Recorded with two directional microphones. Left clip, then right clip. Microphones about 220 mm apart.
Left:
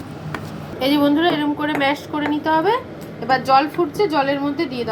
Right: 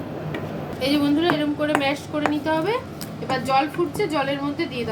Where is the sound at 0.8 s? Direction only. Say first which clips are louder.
Left 4 dB; 10° left (ahead or behind).